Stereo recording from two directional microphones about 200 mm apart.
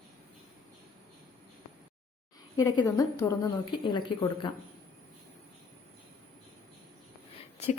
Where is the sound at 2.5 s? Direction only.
20° left (ahead or behind).